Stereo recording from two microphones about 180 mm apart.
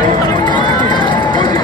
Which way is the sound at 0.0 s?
25° left (ahead or behind).